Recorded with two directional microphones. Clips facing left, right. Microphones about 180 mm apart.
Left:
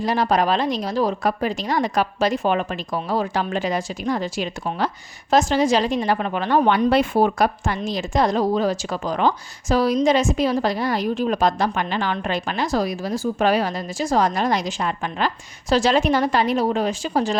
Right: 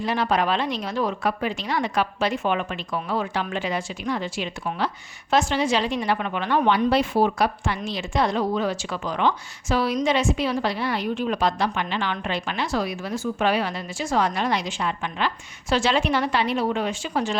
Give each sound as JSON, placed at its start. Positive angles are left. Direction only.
{"t": 0.0, "sound": "a woman's voice", "side_deg": 40}